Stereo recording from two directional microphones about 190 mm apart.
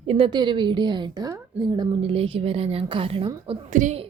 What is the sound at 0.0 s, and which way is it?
A woman's voice, 30° right (ahead or behind).